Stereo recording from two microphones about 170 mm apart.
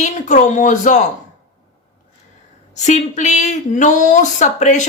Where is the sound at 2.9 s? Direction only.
45° left (ahead or behind).